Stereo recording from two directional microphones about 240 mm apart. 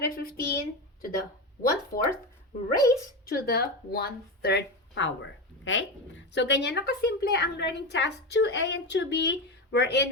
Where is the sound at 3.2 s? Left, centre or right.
Left.